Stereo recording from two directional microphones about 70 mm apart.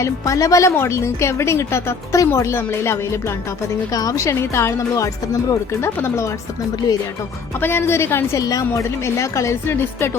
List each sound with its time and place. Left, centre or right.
0.0 s speech: left
3.9 s speech: left
5.8 s speech: left
7.6 s speech: left
8.4 s speech: left